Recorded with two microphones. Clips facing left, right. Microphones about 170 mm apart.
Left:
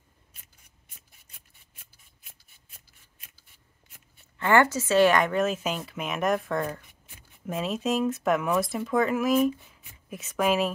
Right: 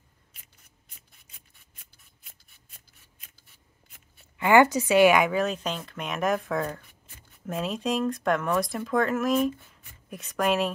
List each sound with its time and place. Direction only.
2.2 s rub: 5° left (ahead or behind)
4.4 s a woman's voice: 15° right (ahead or behind); by 10.7 s centre (ahead or behind)